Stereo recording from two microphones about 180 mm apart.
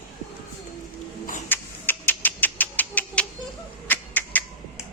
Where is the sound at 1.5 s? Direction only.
10° left (ahead or behind).